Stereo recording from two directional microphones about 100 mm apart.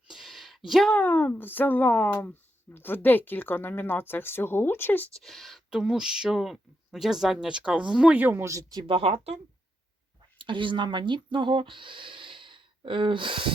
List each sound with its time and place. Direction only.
0.1 s a sound: 5° right (ahead or behind)
0.9 s speech: 15° left (ahead or behind)
5.2 s speech: centre (ahead or behind); by 8.4 s 20° right (ahead or behind)
8.4 s speech: 35° right (ahead or behind)
8.9 s speech: 70° right (ahead or behind); by 9.4 s 90° right
10.3 s speech: 55° right (ahead or behind)